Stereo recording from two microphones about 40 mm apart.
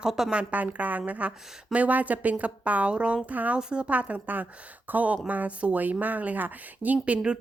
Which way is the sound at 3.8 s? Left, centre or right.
Right.